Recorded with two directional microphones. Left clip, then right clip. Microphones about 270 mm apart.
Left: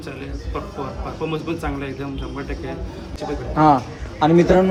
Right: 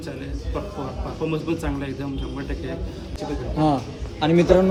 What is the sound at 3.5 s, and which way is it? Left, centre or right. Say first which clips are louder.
Speech: left 7 dB; centre.